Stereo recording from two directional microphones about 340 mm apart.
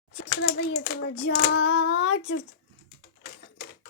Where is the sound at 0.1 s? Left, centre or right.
Left.